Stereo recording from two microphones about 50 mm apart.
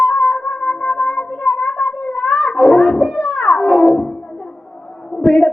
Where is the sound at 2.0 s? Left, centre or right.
Centre.